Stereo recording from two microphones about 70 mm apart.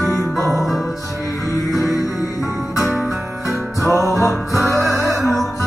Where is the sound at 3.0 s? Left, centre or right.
Centre.